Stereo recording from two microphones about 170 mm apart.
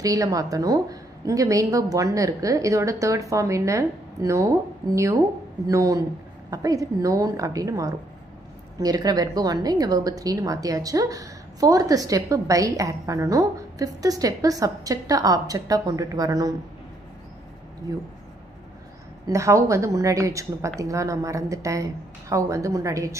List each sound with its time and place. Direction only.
0.0 s a woman's voice: 20° right (ahead or behind)
17.9 s a woman's voice: 20° right (ahead or behind)
19.2 s a woman's voice: 15° right (ahead or behind)